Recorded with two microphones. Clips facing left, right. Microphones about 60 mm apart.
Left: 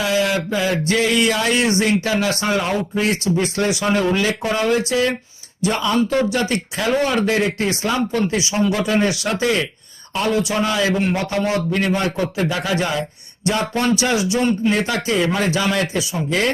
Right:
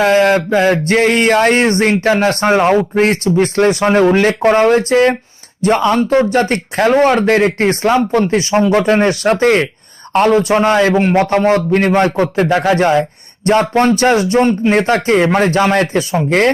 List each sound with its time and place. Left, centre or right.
0.0 s a man's voice: right